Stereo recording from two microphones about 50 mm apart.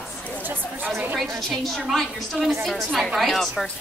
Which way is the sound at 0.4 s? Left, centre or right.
Right.